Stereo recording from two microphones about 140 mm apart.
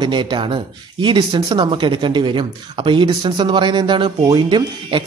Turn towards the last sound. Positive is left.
turn(degrees=-35)  # may be behind; listen again after turning